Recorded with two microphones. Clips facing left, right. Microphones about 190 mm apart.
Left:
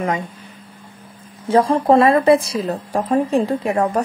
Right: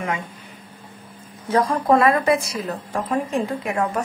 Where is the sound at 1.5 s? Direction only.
25° left (ahead or behind).